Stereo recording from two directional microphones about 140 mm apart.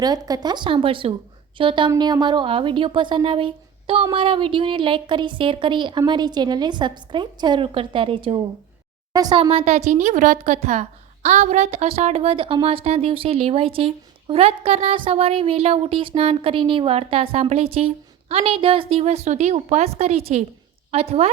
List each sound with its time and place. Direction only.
0.0 s a woman's voice: 25° right (ahead or behind); by 21.2 s 45° right (ahead or behind)